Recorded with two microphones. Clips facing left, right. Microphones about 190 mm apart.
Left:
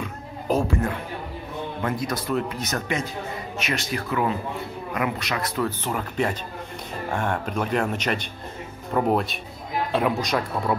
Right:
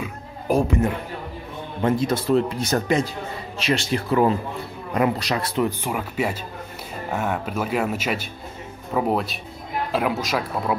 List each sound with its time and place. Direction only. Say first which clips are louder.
0.0 s music: right 1 dB; 15° right (ahead or behind)
1.8 s speech: right 7 dB; 25° right (ahead or behind)
5.7 s speech: right 1 dB; 10° right (ahead or behind)